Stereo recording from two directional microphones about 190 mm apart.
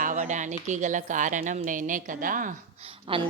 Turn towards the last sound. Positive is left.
turn(degrees=-30)  # may be behind; listen again after turning